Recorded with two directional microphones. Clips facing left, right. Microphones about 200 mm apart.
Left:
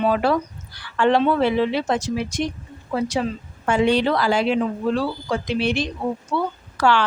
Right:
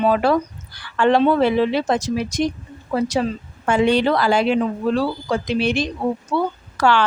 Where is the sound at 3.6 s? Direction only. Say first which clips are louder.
Right 2 dB; 50° right (ahead or behind).